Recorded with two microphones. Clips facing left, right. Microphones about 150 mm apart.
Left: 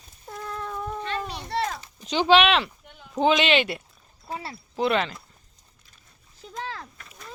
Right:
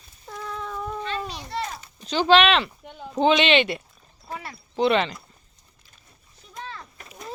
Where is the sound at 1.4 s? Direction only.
70° left (ahead or behind).